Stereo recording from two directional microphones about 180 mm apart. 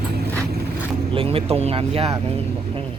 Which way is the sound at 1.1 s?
30° right (ahead or behind).